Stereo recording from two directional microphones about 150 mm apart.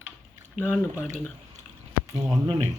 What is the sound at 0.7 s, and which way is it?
Speech, 5° right (ahead or behind).